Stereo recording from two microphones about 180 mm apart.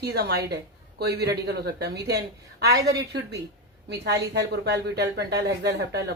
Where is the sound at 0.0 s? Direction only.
65° right (ahead or behind).